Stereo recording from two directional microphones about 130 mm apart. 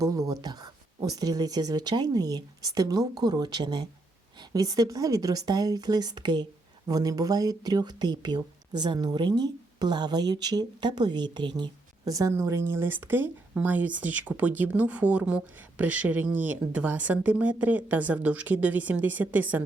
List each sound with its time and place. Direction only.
0.0 s speech: 25° right (ahead or behind)